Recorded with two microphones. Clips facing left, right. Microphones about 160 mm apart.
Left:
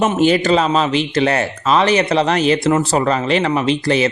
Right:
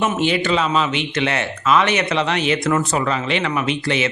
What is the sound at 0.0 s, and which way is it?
A man's voice, 40° left (ahead or behind).